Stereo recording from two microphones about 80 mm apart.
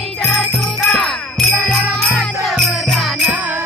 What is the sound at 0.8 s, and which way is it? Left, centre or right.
Music, centre.